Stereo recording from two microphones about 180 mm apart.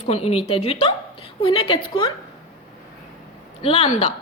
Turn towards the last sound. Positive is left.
turn(degrees=30)  # may be behind; listen again after turning